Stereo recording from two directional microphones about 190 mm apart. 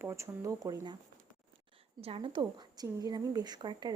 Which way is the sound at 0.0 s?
15° right (ahead or behind).